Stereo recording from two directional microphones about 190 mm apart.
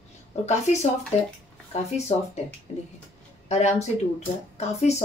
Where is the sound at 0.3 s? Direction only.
35° left (ahead or behind).